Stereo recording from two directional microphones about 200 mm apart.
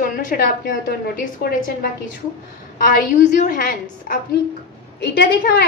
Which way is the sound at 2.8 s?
40° left (ahead or behind).